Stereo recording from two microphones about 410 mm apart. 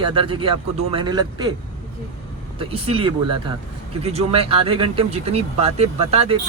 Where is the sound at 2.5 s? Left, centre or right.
Centre.